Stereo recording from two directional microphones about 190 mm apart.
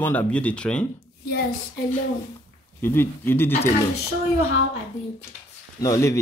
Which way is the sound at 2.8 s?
10° left (ahead or behind).